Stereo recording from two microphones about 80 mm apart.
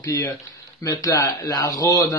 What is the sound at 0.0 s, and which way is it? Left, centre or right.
A man's voice, left.